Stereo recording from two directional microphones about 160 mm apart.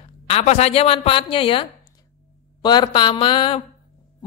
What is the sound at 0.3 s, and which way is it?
Music, 40° left (ahead or behind).